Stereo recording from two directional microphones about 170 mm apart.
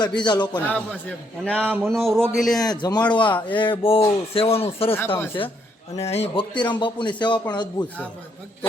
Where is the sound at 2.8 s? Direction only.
25° left (ahead or behind).